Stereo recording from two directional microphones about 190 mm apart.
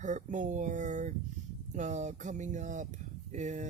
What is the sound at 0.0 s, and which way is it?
Speech, 40° right (ahead or behind).